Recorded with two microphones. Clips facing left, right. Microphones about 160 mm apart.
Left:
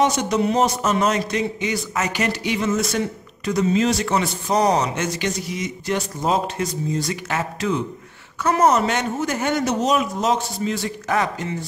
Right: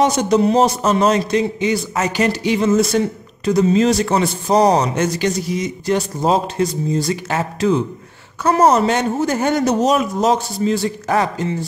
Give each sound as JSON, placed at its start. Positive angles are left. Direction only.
{"t": 0.0, "sound": "speech", "side_deg": -35}